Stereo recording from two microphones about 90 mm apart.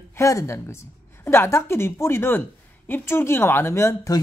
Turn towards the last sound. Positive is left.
turn(degrees=30)  # may be behind; listen again after turning